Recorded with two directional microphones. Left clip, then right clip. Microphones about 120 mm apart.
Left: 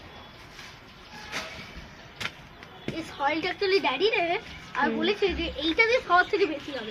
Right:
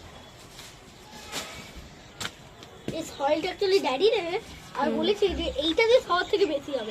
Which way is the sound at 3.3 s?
10° right (ahead or behind).